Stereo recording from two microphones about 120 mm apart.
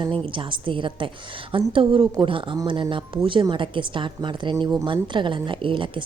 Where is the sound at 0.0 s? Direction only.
45° right (ahead or behind).